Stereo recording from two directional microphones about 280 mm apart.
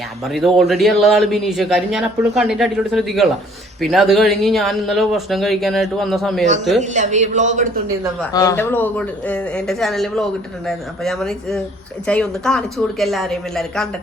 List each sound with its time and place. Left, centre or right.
0.3 s speech: centre
6.9 s a man's voice: right
8.3 s speech: centre